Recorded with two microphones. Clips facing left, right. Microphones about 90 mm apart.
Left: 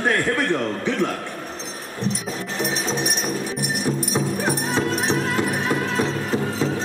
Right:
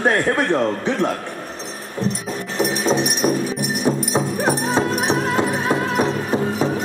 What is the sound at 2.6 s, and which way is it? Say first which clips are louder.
Music: right 7 dB; 65° right (ahead or behind).